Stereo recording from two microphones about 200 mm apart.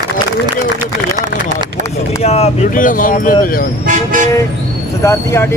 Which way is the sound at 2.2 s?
30° left (ahead or behind).